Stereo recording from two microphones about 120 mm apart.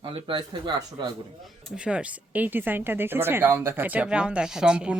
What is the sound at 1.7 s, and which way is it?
Speech, 10° right (ahead or behind).